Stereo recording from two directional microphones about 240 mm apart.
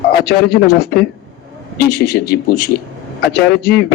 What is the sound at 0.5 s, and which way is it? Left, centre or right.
A man's voice, left.